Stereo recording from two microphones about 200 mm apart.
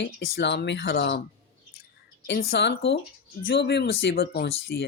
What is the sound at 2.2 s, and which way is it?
Speech, 60° left (ahead or behind).